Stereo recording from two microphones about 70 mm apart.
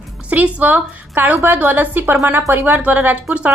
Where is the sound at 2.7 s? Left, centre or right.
Right.